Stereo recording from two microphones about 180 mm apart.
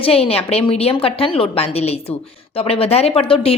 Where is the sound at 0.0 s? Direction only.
35° left (ahead or behind).